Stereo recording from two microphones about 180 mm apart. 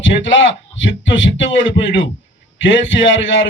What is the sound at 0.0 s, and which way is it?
A man's voice, 90° left.